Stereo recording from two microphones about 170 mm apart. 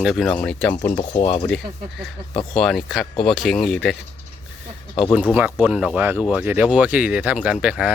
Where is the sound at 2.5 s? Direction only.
Centre (ahead or behind).